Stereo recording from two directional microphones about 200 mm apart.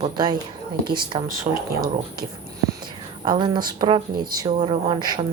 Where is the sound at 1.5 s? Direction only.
35° right (ahead or behind).